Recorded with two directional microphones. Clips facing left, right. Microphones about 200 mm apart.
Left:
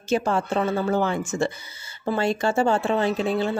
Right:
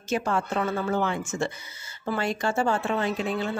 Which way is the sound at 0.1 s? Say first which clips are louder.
Left 4 dB; 30° left (ahead or behind).